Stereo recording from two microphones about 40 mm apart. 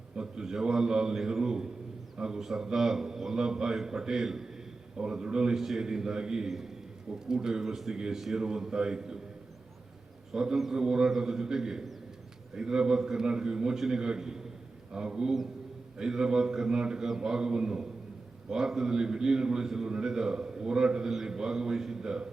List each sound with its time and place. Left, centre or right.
0.2 s a man's voice: centre
5.5 s a man's voice: centre
10.3 s a man's voice: centre